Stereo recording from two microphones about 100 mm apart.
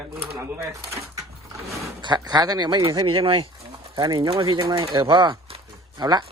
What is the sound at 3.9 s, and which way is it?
Speech, 45° right (ahead or behind).